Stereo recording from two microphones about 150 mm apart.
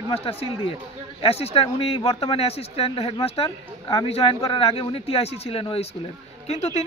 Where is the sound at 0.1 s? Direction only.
40° left (ahead or behind).